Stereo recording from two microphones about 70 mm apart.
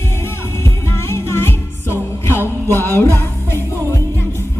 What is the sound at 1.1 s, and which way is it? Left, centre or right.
Music, left.